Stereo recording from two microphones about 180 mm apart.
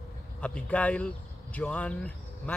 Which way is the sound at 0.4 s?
5° left (ahead or behind).